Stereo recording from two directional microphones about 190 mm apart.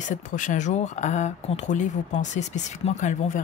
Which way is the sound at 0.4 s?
40° left (ahead or behind).